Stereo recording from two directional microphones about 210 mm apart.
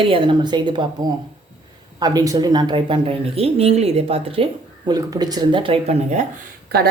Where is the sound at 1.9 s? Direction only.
20° right (ahead or behind).